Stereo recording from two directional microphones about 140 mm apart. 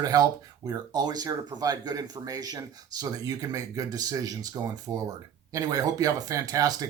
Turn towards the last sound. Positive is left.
turn(degrees=-25)  # may be behind; listen again after turning